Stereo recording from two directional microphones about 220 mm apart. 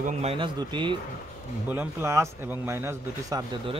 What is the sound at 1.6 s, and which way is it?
A man's voice, 10° right (ahead or behind).